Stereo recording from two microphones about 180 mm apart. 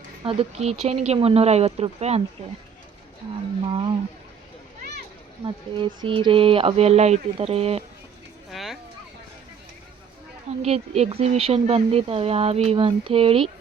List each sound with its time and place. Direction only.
0.3 s speech: 35° right (ahead or behind)
3.7 s speech: 25° right (ahead or behind)
5.7 s speech: 25° right (ahead or behind)
8.4 s a sound: centre (ahead or behind)
10.6 s speech: 35° right (ahead or behind)